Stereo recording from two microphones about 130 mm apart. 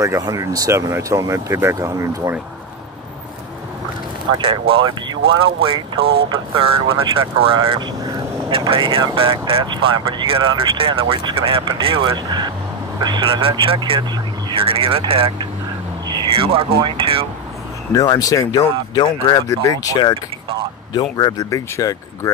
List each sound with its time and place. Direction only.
0.0 s speech: 25° right (ahead or behind)
4.4 s speech: 45° right (ahead or behind)
17.9 s speech: 30° left (ahead or behind)